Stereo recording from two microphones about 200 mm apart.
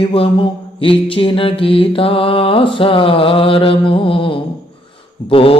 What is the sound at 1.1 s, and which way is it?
Mantra, 25° left (ahead or behind).